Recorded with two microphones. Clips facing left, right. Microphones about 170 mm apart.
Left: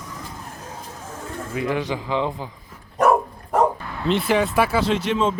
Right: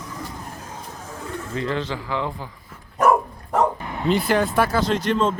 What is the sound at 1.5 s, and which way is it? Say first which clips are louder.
Speech: left 2 dB; 10° left (ahead or behind).